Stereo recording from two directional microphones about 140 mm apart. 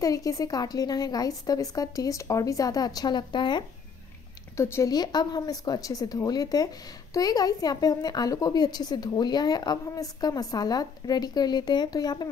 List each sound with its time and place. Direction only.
0.0 s a woman's voice: 25° left (ahead or behind)
4.6 s a woman's voice: 20° left (ahead or behind)